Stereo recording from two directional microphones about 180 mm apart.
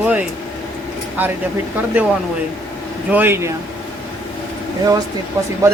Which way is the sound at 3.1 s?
10° right (ahead or behind).